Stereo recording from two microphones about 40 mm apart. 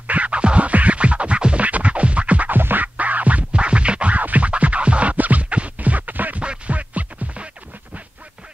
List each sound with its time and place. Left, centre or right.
0.0 s music: right
2.5 s music: right
5.1 s music: right